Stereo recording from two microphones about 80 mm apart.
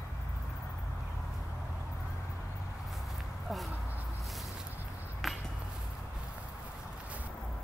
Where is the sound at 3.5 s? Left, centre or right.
Centre.